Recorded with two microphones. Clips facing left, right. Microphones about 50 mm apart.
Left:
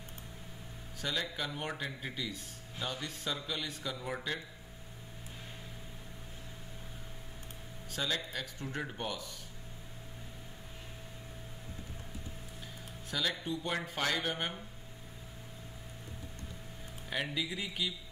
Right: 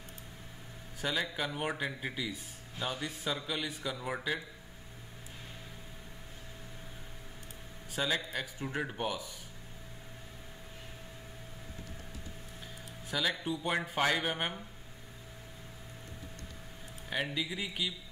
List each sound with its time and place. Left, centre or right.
1.0 s speech: centre
7.9 s speech: centre
13.3 s speech: centre
17.1 s speech: centre